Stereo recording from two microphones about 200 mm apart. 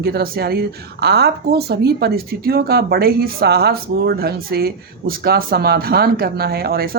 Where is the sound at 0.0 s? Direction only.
50° right (ahead or behind).